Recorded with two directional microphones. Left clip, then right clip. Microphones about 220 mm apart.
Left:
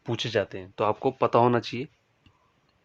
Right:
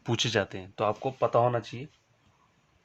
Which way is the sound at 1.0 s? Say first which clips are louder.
Left 4 dB; 45° left (ahead or behind).